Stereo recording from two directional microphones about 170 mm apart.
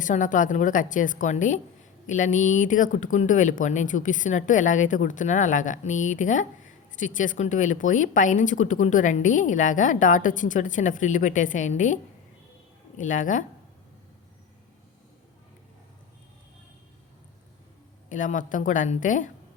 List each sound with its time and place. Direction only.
0.0 s a woman's voice: 50° left (ahead or behind)
13.0 s a woman's voice: 50° left (ahead or behind)
18.1 s a woman's voice: 50° left (ahead or behind)